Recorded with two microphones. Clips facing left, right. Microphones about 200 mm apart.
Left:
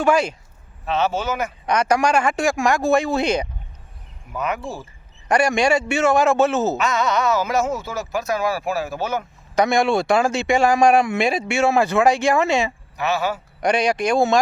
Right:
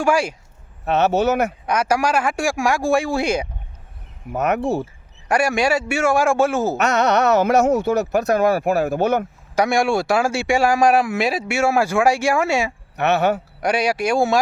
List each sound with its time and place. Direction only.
0.0 s speech: 10° right (ahead or behind)
0.9 s speech: 65° right (ahead or behind)
1.6 s speech: 5° right (ahead or behind)
4.3 s speech: 65° right (ahead or behind)
5.3 s speech: 5° right (ahead or behind)
6.7 s speech: 65° right (ahead or behind)
9.6 s speech: 10° right (ahead or behind)
13.0 s speech: 65° right (ahead or behind)
13.6 s speech: 5° right (ahead or behind)